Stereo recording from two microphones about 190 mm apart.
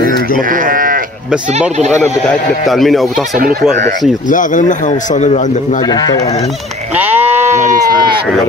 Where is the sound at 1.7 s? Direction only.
35° right (ahead or behind).